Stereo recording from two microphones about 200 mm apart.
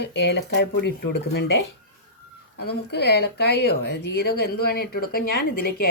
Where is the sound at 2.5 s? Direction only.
55° left (ahead or behind).